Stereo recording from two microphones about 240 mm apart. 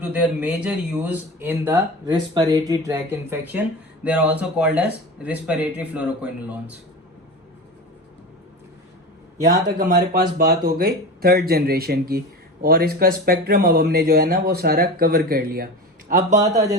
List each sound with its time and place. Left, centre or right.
0.0 s speech: centre
9.9 s speech: right